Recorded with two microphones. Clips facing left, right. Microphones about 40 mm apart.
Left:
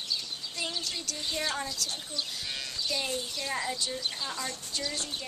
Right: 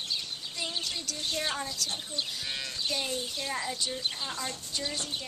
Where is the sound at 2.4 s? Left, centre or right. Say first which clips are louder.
Right 1 dB; centre.